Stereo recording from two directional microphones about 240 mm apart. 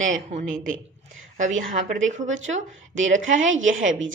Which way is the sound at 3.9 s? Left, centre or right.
Right.